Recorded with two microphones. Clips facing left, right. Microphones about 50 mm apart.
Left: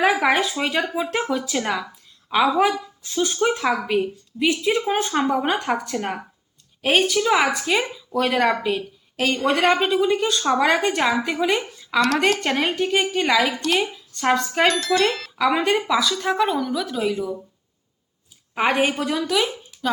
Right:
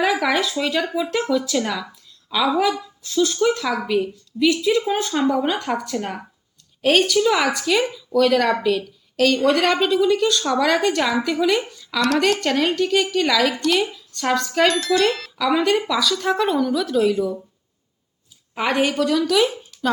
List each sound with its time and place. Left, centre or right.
0.0 s speech: left
3.0 s speech: left
6.8 s a woman's voice: centre
11.9 s a child's voice: centre
12.4 s speech: left
13.5 s a child's voice: centre
14.2 s speech: centre
14.7 s a child's voice: centre
15.4 s a woman's voice: left
18.5 s speech: left
19.4 s a sound: centre